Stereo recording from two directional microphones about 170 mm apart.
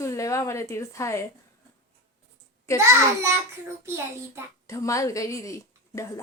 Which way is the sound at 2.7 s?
15° right (ahead or behind).